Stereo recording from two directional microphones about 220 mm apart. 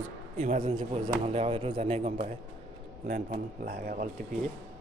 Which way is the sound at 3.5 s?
40° right (ahead or behind).